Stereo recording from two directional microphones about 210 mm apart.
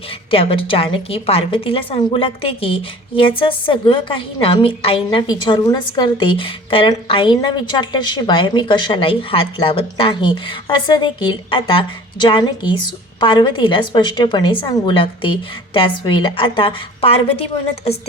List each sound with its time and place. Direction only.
0.3 s a woman's voice: 25° left (ahead or behind)